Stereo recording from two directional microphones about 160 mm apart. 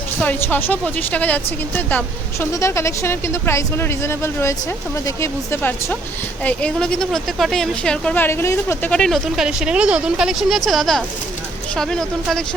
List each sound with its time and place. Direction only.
0.2 s a woman's voice: 10° left (ahead or behind)
8.9 s a woman's voice: 5° left (ahead or behind)